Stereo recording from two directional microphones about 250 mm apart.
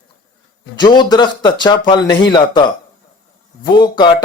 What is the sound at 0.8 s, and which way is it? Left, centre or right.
Speech, centre.